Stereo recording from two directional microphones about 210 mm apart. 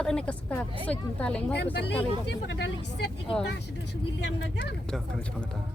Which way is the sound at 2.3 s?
55° left (ahead or behind).